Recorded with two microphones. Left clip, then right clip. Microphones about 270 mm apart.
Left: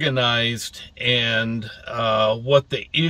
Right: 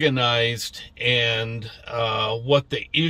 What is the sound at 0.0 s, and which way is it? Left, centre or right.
Speech, centre.